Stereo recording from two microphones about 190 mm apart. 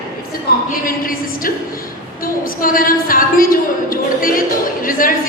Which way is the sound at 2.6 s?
45° left (ahead or behind).